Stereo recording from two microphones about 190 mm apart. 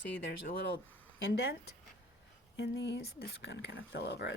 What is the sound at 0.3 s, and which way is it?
Speech, 50° left (ahead or behind).